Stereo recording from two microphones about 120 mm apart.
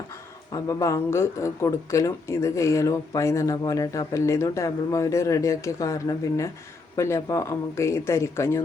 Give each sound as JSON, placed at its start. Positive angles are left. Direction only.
{"t": 0.5, "sound": "speech", "side_deg": 25}